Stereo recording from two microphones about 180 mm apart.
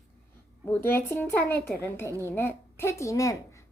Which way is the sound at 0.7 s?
10° left (ahead or behind).